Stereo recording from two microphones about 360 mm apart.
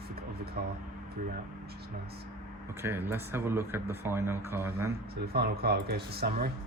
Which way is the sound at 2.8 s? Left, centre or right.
Centre.